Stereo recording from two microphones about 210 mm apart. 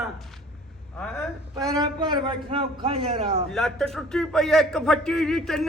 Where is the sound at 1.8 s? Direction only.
20° right (ahead or behind).